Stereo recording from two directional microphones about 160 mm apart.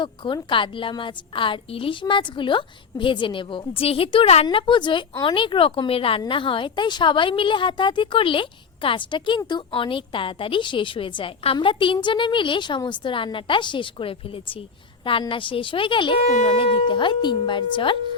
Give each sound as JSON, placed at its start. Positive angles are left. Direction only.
{"t": 0.2, "sound": "a woman's voice", "side_deg": 30}